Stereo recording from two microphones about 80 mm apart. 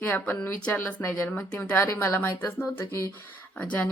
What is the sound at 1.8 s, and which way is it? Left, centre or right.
Speech, left.